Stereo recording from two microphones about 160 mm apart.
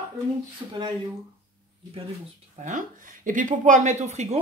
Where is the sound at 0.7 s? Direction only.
25° right (ahead or behind).